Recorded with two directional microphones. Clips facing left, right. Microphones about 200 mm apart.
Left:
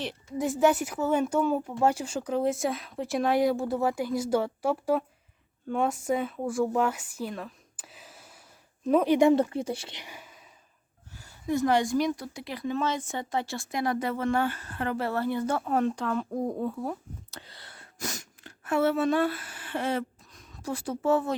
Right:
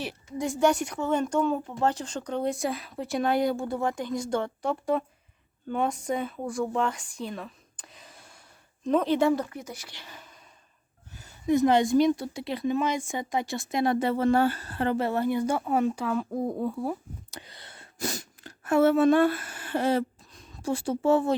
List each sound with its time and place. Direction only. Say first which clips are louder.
0.0 s a woman's voice: left 1 dB; centre (ahead or behind)
9.3 s speech: left 5 dB; 30° left (ahead or behind)
10.0 s a woman's voice: left 1 dB; 10° left (ahead or behind)
11.1 s a woman's voice: right 5 dB; 20° right (ahead or behind)